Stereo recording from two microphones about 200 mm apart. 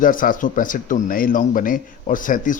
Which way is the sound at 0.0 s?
45° left (ahead or behind).